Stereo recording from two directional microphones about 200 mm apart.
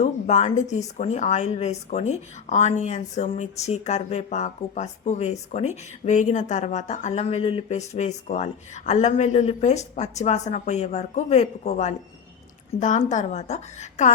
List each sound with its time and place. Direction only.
0.0 s speech: 35° left (ahead or behind)